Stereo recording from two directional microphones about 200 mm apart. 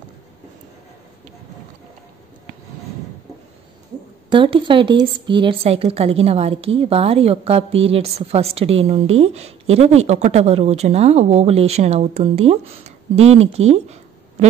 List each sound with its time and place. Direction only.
4.3 s a woman's voice: 25° right (ahead or behind)